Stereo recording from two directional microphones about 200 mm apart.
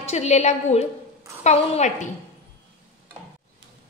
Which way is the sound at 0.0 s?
35° left (ahead or behind).